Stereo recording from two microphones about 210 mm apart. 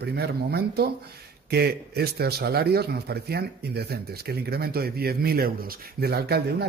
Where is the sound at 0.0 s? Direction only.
50° right (ahead or behind).